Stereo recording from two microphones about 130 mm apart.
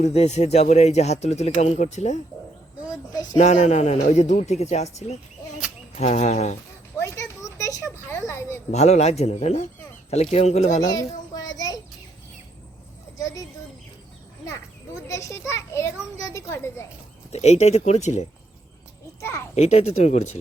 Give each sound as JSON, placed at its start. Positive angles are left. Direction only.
{"t": 0.0, "sound": "speech", "side_deg": 55}
{"t": 3.3, "sound": "speech", "side_deg": 65}
{"t": 7.0, "sound": "a sound", "side_deg": 25}
{"t": 8.7, "sound": "speech", "side_deg": 55}
{"t": 11.3, "sound": "child singing", "side_deg": 30}
{"t": 15.0, "sound": "a child's voice", "side_deg": 25}
{"t": 17.3, "sound": "speech", "side_deg": 60}
{"t": 19.5, "sound": "speech", "side_deg": 60}